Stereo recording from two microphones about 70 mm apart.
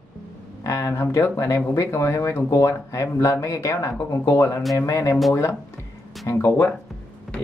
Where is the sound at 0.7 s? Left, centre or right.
Left.